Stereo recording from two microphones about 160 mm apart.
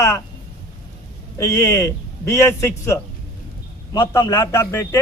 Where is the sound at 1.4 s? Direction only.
20° left (ahead or behind).